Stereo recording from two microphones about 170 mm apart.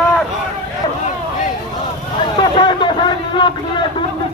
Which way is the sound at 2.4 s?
30° left (ahead or behind).